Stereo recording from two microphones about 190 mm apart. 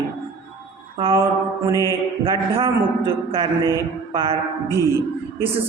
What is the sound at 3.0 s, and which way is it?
A man's voice, 30° right (ahead or behind).